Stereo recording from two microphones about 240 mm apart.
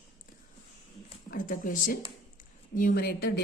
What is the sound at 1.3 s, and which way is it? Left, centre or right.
A woman's voice, left.